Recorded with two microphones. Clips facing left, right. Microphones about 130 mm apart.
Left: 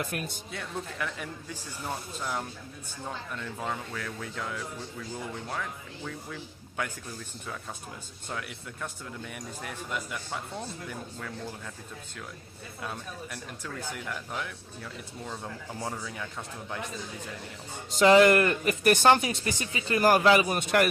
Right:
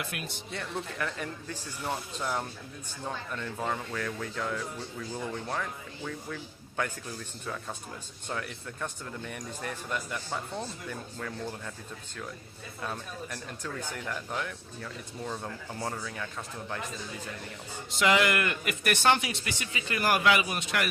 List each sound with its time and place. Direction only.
0.0 s a man's voice: 45° left (ahead or behind)
0.5 s speech: 5° left (ahead or behind)
3.0 s speech: centre (ahead or behind)
6.0 s speech: centre (ahead or behind)
8.3 s speech: 5° left (ahead or behind)
12.8 s speech: 5° left (ahead or behind)
17.9 s speech: 35° left (ahead or behind)
20.6 s a man's voice: 50° left (ahead or behind)